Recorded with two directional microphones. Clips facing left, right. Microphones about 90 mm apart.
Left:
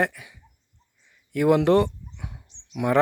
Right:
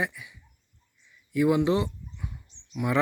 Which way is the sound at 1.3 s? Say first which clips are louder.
Left 4 dB; 65° left (ahead or behind).